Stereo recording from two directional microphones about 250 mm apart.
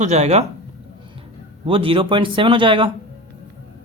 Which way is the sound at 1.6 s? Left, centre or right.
Right.